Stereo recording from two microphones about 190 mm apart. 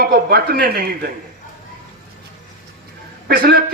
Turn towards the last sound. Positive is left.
turn(degrees=-50)  # may be behind; listen again after turning